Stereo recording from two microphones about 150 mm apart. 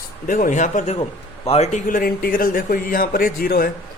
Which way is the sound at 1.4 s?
45° left (ahead or behind).